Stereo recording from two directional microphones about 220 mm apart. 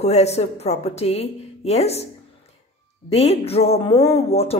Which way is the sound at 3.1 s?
25° left (ahead or behind).